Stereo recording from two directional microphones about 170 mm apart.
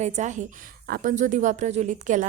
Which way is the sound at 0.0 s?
45° right (ahead or behind).